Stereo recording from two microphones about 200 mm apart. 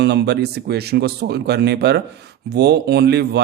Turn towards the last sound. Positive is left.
turn(degrees=-55)  # may be behind; listen again after turning